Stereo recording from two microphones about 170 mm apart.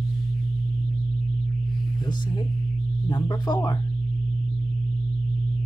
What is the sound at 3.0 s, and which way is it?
Speech, 25° left (ahead or behind).